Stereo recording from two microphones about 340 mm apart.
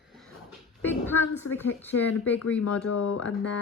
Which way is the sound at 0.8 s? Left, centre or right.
Centre.